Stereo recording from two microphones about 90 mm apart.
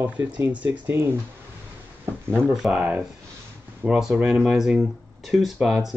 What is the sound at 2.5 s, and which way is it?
Speech, 5° right (ahead or behind).